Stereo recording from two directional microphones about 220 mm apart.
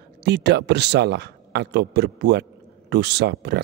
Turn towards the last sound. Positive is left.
turn(degrees=-50)  # may be behind; listen again after turning